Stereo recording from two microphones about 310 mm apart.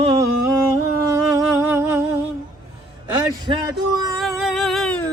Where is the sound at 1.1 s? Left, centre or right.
Centre.